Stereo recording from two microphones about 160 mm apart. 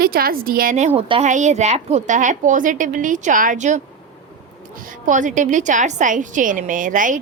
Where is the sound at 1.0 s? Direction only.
40° right (ahead or behind).